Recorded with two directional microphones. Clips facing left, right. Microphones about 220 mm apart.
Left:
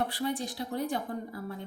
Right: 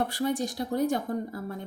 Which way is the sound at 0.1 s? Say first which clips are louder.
Right 4 dB; 45° right (ahead or behind).